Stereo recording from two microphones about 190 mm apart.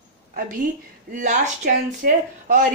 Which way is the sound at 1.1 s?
40° right (ahead or behind).